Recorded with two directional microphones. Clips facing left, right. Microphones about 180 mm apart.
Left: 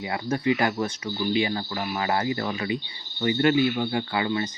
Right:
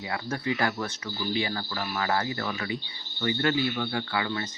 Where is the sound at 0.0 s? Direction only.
20° left (ahead or behind).